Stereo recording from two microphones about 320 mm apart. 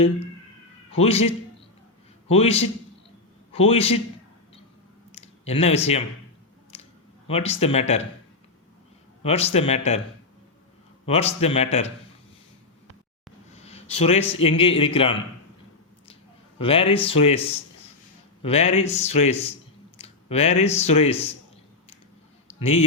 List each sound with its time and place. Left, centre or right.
0.9 s speech: centre
5.1 s a sound: centre
7.3 s speech: centre
9.2 s speech: centre
11.0 s a man's voice: centre
13.6 s a man's voice: centre
16.6 s speech: centre
18.4 s speech: centre
22.6 s speech: centre